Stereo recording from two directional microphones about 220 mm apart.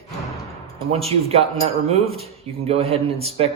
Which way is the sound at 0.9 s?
25° right (ahead or behind).